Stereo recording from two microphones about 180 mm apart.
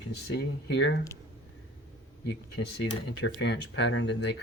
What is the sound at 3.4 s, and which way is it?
Speech, 70° left (ahead or behind).